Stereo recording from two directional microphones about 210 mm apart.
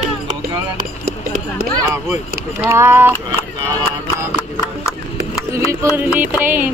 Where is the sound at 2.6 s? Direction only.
10° right (ahead or behind).